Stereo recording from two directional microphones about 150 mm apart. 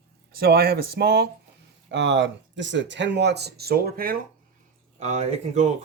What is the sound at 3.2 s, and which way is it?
Speech, 90° right.